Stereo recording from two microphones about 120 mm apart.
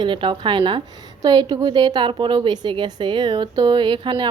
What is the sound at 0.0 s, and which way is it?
A woman's voice, 45° right (ahead or behind).